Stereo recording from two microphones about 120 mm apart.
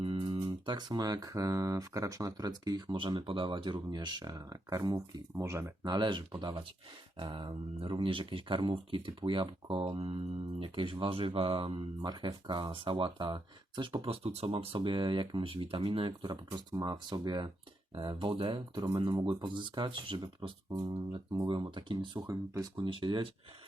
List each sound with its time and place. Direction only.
0.0 s speech: 50° right (ahead or behind); by 5.7 s 25° right (ahead or behind)
5.8 s speech: 35° right (ahead or behind)
12.0 s speech: 35° right (ahead or behind)